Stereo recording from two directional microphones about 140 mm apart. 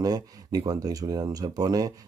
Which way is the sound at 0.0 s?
25° right (ahead or behind).